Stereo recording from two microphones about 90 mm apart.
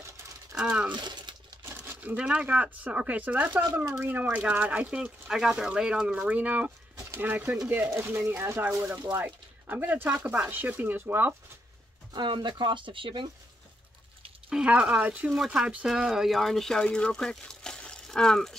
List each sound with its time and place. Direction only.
0.6 s speech: 10° right (ahead or behind)
0.9 s a sound: 55° right (ahead or behind)
1.6 s speech: 20° right (ahead or behind)
12.1 s speech: 55° right (ahead or behind)
14.5 s speech: 10° right (ahead or behind); by 18.6 s 5° left (ahead or behind)